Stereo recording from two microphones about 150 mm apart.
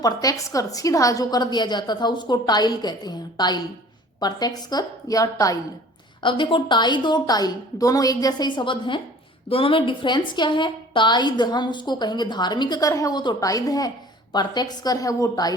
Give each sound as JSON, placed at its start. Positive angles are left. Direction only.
{"t": 0.0, "sound": "a woman's voice", "side_deg": 25}
{"t": 6.2, "sound": "a woman's voice", "side_deg": 35}